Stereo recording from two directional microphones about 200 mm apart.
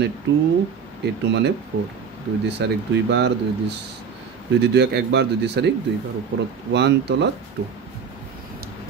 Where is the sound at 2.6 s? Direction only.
55° right (ahead or behind).